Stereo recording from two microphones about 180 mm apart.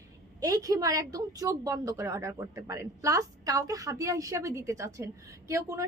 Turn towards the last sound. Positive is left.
turn(degrees=-15)  # may be behind; listen again after turning